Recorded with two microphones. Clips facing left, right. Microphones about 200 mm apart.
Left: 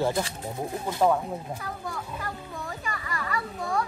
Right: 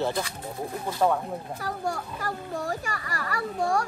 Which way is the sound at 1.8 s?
50° right (ahead or behind).